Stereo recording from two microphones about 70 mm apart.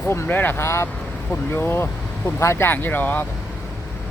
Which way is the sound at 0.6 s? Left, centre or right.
Left.